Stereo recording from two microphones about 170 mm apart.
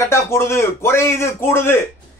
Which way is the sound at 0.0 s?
15° left (ahead or behind).